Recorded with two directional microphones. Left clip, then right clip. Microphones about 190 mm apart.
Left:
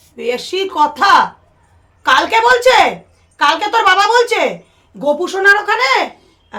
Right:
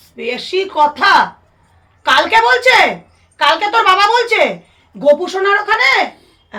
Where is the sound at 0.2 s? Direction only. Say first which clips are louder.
Even; 20° left (ahead or behind).